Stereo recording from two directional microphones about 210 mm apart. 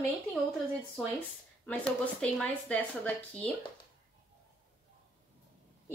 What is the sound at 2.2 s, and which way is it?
A woman's voice, 5° left (ahead or behind).